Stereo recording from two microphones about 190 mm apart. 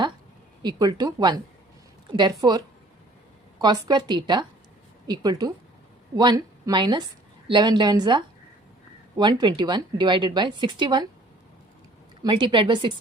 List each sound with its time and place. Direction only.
0.6 s a woman's voice: 20° right (ahead or behind)
12.2 s a woman's voice: 25° right (ahead or behind)